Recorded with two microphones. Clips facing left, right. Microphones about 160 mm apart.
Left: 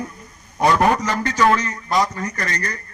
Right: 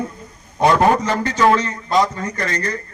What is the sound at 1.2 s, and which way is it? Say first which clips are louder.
A man's voice: right 1 dB; 25° right (ahead or behind).